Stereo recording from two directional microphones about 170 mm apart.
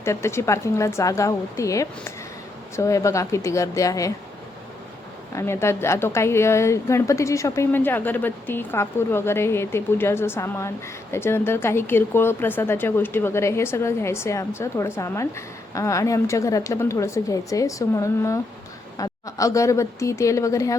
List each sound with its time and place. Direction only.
0.0 s speech: 15° left (ahead or behind)
5.3 s a woman's voice: 15° left (ahead or behind)